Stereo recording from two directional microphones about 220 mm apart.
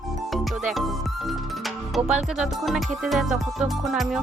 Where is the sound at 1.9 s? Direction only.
Centre (ahead or behind).